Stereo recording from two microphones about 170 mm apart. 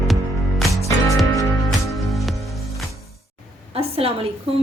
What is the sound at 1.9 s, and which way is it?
Music, centre (ahead or behind).